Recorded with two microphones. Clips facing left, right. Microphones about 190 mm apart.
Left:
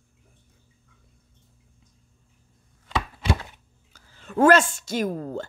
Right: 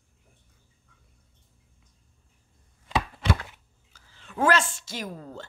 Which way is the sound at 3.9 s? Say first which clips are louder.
Left 10 dB; 45° left (ahead or behind).